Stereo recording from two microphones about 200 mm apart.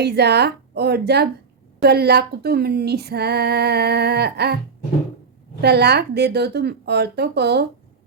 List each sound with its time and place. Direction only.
0.0 s a woman's voice: 55° right (ahead or behind)
1.8 s female singing: 55° right (ahead or behind)
5.6 s a woman's voice: 55° right (ahead or behind)